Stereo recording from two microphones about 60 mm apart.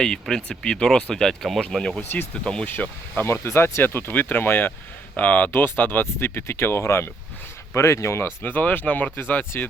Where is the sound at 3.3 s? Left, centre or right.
Left.